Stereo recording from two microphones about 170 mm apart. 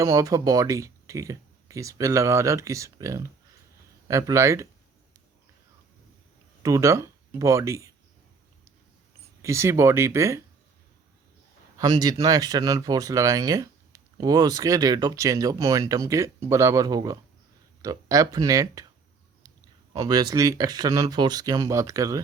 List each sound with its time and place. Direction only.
0.0 s speech: 20° right (ahead or behind)
6.6 s speech: 20° right (ahead or behind)
9.4 s speech: 15° right (ahead or behind)
11.8 s speech: 20° right (ahead or behind)
19.9 s speech: 25° right (ahead or behind)